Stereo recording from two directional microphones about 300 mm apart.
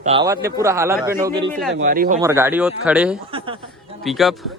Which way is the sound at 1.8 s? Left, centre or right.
Right.